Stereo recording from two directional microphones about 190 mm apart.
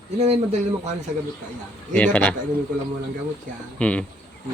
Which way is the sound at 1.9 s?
10° left (ahead or behind).